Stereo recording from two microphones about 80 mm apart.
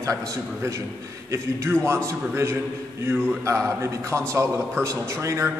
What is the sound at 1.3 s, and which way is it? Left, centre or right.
Speech, right.